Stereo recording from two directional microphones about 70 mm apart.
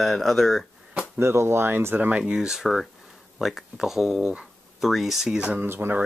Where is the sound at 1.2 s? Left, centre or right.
Right.